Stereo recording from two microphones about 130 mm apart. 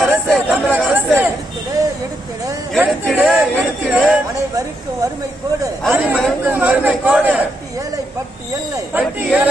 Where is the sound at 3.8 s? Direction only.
10° right (ahead or behind).